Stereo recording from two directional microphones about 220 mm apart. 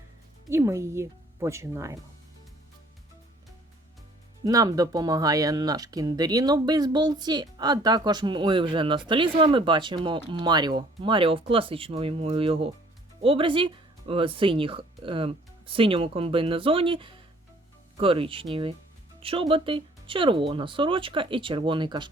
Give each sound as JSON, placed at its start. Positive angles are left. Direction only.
{"t": 0.5, "sound": "speech", "side_deg": -15}
{"t": 4.4, "sound": "speech", "side_deg": -15}